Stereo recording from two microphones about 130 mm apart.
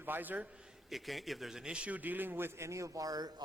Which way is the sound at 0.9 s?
Centre (ahead or behind).